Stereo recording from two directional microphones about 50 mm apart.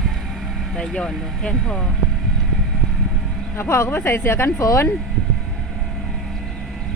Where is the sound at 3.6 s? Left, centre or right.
Left.